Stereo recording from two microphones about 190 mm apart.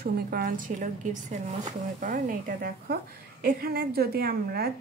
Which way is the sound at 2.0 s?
45° right (ahead or behind).